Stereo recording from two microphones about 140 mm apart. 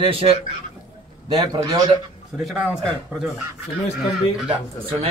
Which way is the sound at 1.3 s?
30° right (ahead or behind).